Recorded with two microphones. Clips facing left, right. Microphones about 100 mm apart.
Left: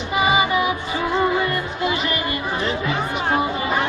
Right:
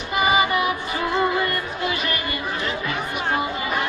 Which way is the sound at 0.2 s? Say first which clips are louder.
Left 1 dB; 5° left (ahead or behind).